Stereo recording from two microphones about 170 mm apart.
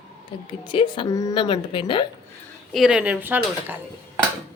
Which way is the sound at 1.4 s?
35° left (ahead or behind).